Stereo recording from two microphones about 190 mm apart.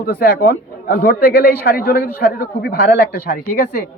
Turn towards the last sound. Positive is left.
turn(degrees=50)  # may be behind; listen again after turning